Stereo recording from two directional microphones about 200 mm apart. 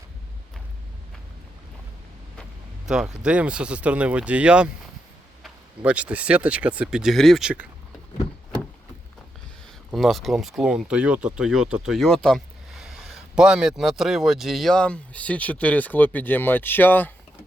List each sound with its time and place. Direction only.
2.8 s speech: 5° right (ahead or behind)
9.9 s speech: centre (ahead or behind)